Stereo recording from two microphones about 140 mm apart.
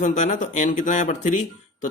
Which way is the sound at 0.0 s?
60° left (ahead or behind).